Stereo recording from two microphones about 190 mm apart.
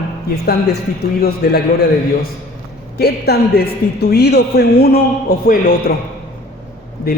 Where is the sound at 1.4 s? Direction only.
55° left (ahead or behind).